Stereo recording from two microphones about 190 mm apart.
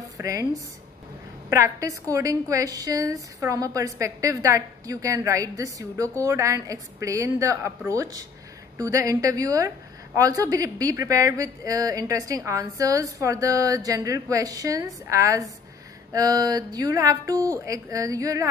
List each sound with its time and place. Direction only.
0.2 s a woman's voice: 15° right (ahead or behind)